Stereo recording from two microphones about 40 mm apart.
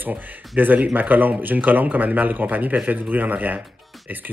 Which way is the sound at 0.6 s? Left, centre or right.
Right.